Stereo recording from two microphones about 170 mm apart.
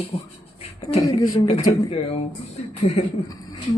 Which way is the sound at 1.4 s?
40° left (ahead or behind).